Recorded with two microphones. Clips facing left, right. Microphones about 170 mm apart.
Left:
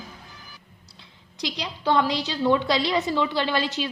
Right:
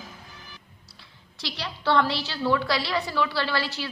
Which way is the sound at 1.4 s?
15° left (ahead or behind).